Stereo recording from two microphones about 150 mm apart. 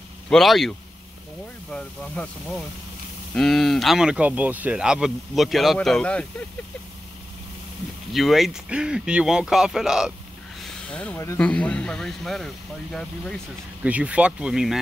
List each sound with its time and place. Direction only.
0.3 s speech: centre (ahead or behind)
8.1 s speech: centre (ahead or behind)
10.9 s speech: 10° left (ahead or behind)
11.1 s speech: 20° left (ahead or behind)
11.4 s speech: 5° left (ahead or behind)
13.8 s speech: 10° right (ahead or behind)